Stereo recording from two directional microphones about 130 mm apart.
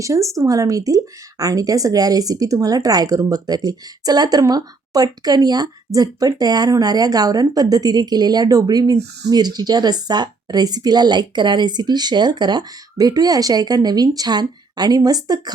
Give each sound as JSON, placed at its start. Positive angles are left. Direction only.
{"t": 0.0, "sound": "speech", "side_deg": -25}